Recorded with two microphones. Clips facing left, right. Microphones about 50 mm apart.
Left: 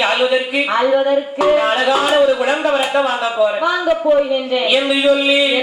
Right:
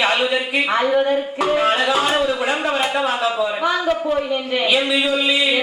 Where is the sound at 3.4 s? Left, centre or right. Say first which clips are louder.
Left 4 dB; centre.